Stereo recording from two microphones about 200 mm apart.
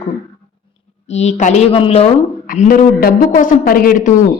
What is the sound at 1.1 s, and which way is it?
A woman's voice, 35° left (ahead or behind).